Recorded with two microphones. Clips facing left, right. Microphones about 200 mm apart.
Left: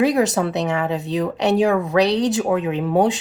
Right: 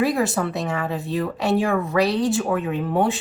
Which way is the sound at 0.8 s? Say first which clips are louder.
Left 3 dB; 20° left (ahead or behind).